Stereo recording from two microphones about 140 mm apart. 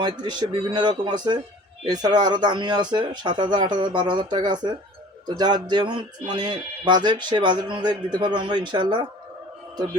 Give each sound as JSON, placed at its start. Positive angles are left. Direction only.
{"t": 0.0, "sound": "speech", "side_deg": -30}